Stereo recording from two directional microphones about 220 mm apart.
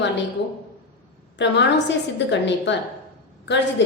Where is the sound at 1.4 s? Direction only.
55° left (ahead or behind).